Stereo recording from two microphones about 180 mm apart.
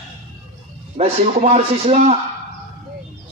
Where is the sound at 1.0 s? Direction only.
35° right (ahead or behind).